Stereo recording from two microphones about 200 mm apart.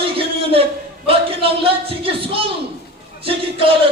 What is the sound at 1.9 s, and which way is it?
Speech, 30° right (ahead or behind).